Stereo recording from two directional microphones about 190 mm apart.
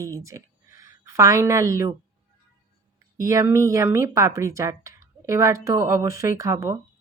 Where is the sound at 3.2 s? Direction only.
15° right (ahead or behind).